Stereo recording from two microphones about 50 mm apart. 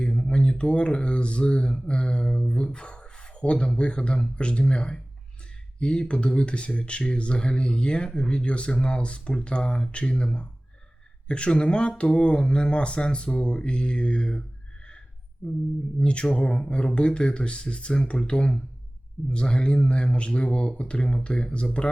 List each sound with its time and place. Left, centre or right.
0.0 s speech: centre